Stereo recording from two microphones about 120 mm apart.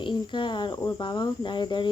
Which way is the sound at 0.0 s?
40° left (ahead or behind).